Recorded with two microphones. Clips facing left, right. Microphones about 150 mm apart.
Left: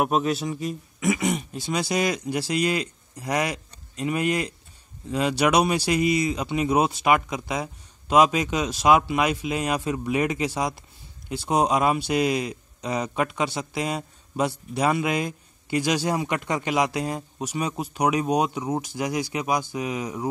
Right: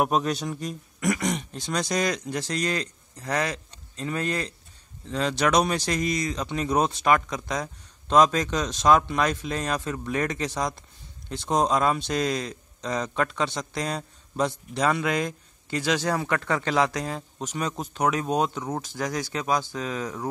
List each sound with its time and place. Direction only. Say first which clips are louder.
0.0 s a man's voice: left 1 dB; centre (ahead or behind)